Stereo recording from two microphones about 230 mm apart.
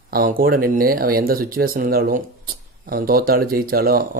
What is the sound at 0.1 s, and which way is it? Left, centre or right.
Speech, right.